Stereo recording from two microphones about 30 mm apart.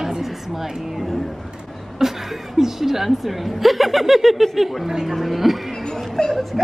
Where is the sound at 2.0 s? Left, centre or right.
Centre.